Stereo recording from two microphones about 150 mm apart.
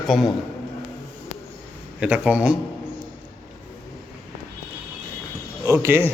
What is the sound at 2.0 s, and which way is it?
Speech, 10° right (ahead or behind).